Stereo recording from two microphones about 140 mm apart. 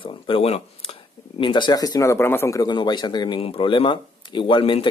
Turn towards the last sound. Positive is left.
turn(degrees=40)  # may be behind; listen again after turning